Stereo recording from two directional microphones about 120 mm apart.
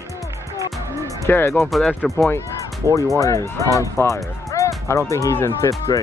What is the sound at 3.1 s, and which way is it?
Speech, 25° left (ahead or behind).